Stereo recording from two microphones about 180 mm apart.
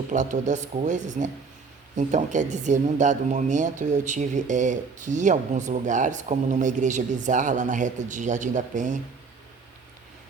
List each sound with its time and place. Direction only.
0.1 s a woman's voice: 45° right (ahead or behind)